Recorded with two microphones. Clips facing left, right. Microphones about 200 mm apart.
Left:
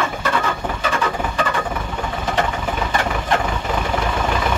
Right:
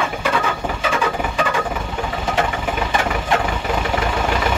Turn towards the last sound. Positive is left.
turn(degrees=-5)  # may be behind; listen again after turning